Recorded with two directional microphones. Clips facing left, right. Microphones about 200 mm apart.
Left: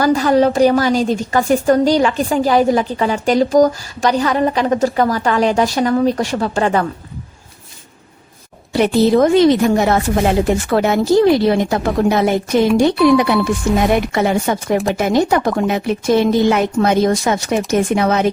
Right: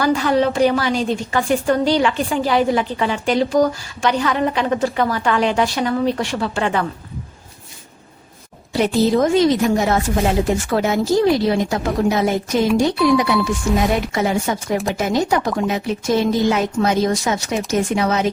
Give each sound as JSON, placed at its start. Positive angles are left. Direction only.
{"t": 0.0, "sound": "a woman's voice", "side_deg": 40}
{"t": 8.7, "sound": "a woman's voice", "side_deg": 65}